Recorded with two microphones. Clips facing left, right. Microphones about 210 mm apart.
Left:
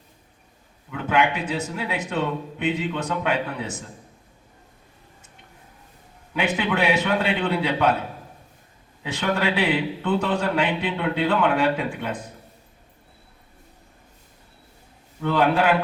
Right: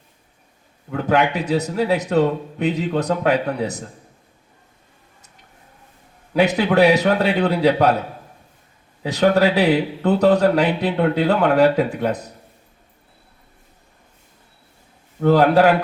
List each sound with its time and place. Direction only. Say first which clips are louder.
0.9 s a man's voice: right 4 dB; 40° right (ahead or behind)
6.3 s a man's voice: right 8 dB; 40° right (ahead or behind)
9.0 s a man's voice: right 8 dB; 40° right (ahead or behind)
15.2 s a man's voice: right 7 dB; 40° right (ahead or behind)